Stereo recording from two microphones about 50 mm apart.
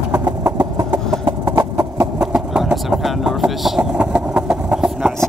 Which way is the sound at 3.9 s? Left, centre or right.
Right.